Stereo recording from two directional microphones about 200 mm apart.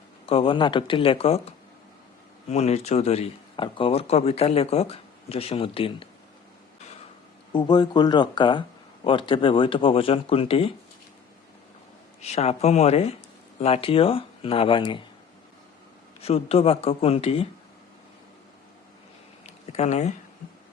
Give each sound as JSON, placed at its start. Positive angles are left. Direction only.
{"t": 0.3, "sound": "a man's voice", "side_deg": 25}
{"t": 7.5, "sound": "speech", "side_deg": 20}
{"t": 12.2, "sound": "a man's voice", "side_deg": 30}
{"t": 16.2, "sound": "speech", "side_deg": 30}
{"t": 19.5, "sound": "a sound", "side_deg": 35}